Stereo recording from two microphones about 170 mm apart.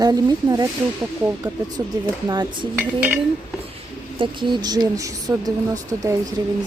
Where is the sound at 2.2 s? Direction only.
25° right (ahead or behind).